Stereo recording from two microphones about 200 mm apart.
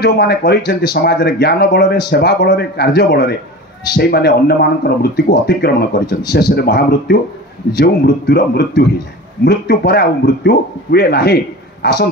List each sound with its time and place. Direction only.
0.0 s a man's voice: 50° left (ahead or behind)